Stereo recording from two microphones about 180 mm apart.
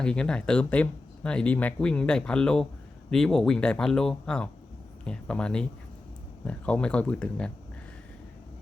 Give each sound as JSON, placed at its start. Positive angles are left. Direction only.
{"t": 0.0, "sound": "speech", "side_deg": 5}